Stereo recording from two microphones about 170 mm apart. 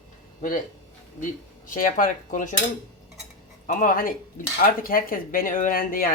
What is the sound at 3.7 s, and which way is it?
Speech, 55° left (ahead or behind).